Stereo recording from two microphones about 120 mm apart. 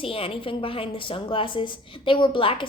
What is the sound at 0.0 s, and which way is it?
A woman's voice, 50° left (ahead or behind).